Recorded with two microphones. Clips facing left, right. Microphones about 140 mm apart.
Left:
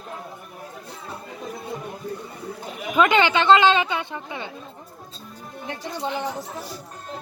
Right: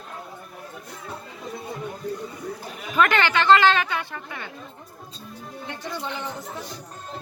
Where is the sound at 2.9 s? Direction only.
15° left (ahead or behind).